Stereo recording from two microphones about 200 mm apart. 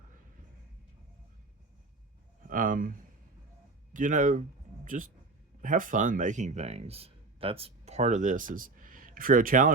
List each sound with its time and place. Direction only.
2.5 s speech: 45° right (ahead or behind)
3.9 s speech: 40° right (ahead or behind)